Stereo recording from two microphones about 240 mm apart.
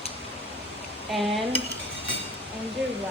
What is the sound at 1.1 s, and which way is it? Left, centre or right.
Speech, centre.